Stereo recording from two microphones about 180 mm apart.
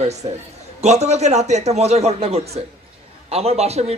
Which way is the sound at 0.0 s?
40° right (ahead or behind).